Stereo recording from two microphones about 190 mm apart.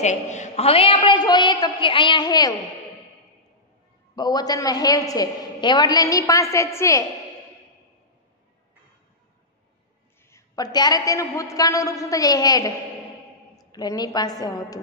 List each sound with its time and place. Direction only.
0.0 s a woman's voice: 40° left (ahead or behind); by 2.5 s 20° left (ahead or behind)
4.1 s a woman's voice: 20° left (ahead or behind)
10.3 s a woman's voice: 20° left (ahead or behind)